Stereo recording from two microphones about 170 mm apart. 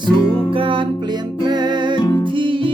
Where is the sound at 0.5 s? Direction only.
30° right (ahead or behind).